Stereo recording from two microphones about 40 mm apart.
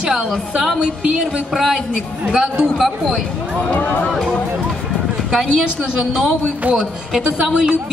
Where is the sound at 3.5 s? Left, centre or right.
Left.